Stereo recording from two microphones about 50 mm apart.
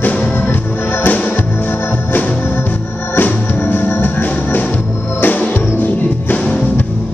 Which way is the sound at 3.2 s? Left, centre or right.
Left.